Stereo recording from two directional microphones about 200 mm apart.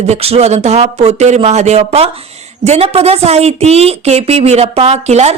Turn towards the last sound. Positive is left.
turn(degrees=-35)  # may be behind; listen again after turning